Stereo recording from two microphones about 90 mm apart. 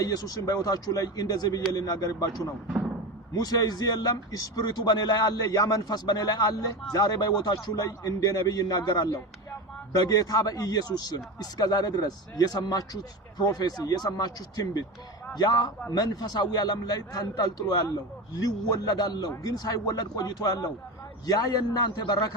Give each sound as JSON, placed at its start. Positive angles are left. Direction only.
{"t": 0.0, "sound": "a man's voice", "side_deg": 45}